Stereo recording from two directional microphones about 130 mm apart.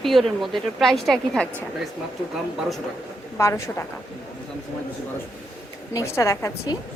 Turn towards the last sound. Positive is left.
turn(degrees=25)  # may be behind; listen again after turning